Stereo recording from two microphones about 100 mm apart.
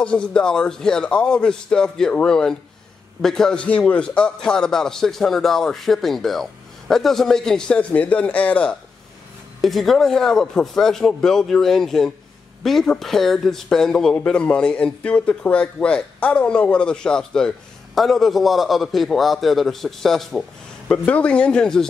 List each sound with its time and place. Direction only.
0.0 s a man's voice: 10° left (ahead or behind)
9.6 s a man's voice: centre (ahead or behind)